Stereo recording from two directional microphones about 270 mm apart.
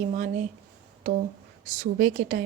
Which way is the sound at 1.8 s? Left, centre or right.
Right.